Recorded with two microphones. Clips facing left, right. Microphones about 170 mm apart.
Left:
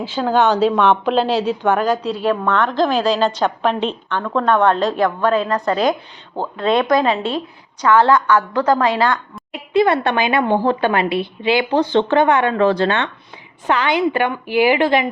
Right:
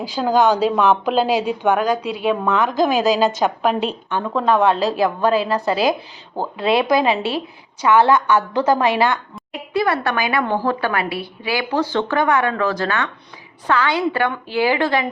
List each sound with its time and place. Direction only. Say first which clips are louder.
0.2 s a woman's voice: left 1 dB; centre (ahead or behind)
7.9 s a woman's voice: left 1 dB; 20° right (ahead or behind)
9.5 s speech: left 4 dB; 20° left (ahead or behind)
13.7 s a woman's voice: left 2 dB; 20° left (ahead or behind)